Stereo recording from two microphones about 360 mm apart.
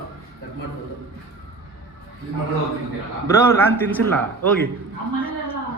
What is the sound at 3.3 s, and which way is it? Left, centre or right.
Speech, centre.